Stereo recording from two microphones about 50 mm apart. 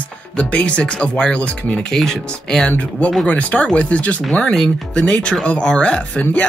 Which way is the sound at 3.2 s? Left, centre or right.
Left.